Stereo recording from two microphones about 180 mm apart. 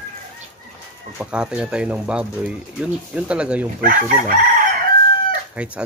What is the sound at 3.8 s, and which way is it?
Chicken, 50° right (ahead or behind).